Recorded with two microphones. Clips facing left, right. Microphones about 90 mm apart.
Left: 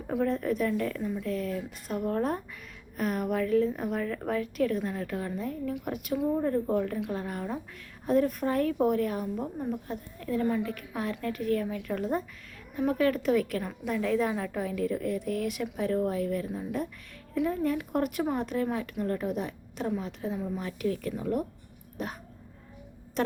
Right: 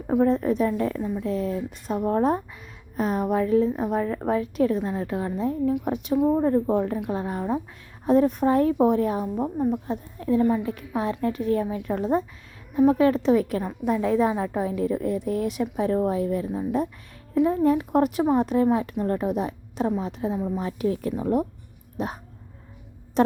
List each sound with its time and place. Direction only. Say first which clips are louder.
0.1 s a woman's voice: right 7 dB; 30° right (ahead or behind)